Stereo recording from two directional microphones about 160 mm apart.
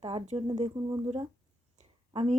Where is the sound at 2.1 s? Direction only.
40° right (ahead or behind).